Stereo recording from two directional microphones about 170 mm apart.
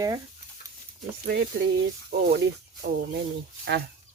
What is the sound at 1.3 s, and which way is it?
Speech, 75° right (ahead or behind).